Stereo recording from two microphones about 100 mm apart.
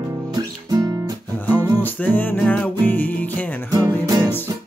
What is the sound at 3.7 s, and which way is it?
Music, 40° right (ahead or behind).